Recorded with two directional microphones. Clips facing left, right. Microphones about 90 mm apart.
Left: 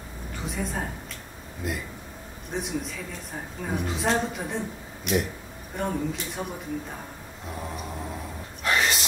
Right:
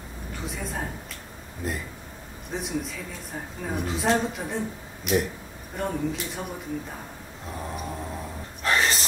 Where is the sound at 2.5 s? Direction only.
Centre (ahead or behind).